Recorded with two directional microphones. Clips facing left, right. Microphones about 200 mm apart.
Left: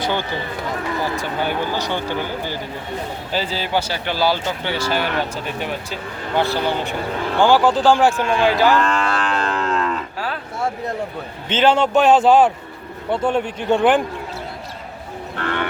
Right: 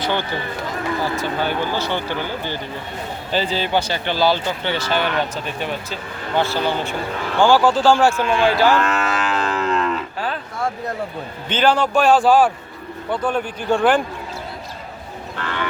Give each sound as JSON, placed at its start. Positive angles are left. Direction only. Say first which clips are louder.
{"t": 0.0, "sound": "speech", "louder": "even", "side_deg": 10}
{"t": 1.4, "sound": "speech", "louder": "left 1 dB", "side_deg": 15}
{"t": 8.8, "sound": "moo", "louder": "left 1 dB", "side_deg": -5}
{"t": 11.4, "sound": "a man's voice", "louder": "left 2 dB", "side_deg": 25}